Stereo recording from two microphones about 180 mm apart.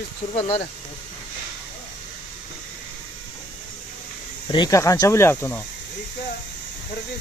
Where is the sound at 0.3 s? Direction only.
35° left (ahead or behind).